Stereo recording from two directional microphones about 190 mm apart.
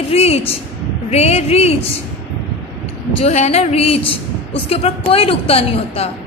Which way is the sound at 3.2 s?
35° left (ahead or behind).